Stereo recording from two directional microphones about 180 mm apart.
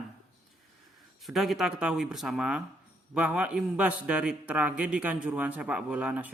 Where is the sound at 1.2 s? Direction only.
Centre (ahead or behind).